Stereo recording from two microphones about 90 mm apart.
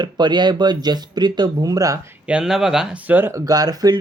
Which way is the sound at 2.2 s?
10° right (ahead or behind).